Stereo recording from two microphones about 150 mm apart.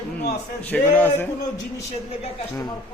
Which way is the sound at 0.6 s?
10° left (ahead or behind).